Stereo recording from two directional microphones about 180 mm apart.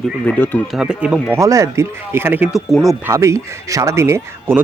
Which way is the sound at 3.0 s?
15° right (ahead or behind).